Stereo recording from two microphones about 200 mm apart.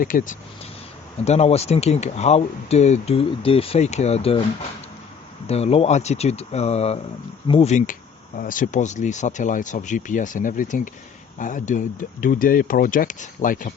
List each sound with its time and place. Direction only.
0.0 s speech: 40° left (ahead or behind)
1.2 s speech: 30° left (ahead or behind)
5.5 s speech: 30° left (ahead or behind)